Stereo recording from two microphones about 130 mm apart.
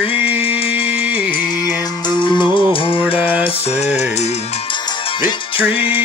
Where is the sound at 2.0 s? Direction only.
35° left (ahead or behind).